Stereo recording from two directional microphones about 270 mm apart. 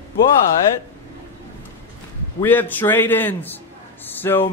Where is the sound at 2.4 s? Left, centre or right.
Centre.